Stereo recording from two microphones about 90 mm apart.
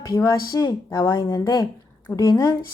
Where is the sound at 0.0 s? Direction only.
40° left (ahead or behind).